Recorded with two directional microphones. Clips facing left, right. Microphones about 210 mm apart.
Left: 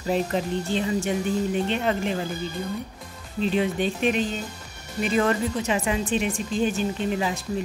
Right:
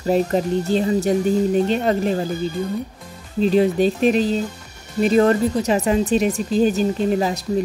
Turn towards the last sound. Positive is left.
turn(degrees=-40)  # may be behind; listen again after turning